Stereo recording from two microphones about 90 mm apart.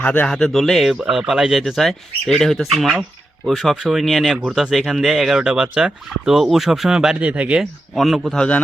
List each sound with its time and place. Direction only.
0.0 s speech: 20° left (ahead or behind)
0.3 s speech: 5° left (ahead or behind)
0.9 s speech: 10° right (ahead or behind)
7.6 s speech: centre (ahead or behind)
8.4 s a man's voice: 15° left (ahead or behind)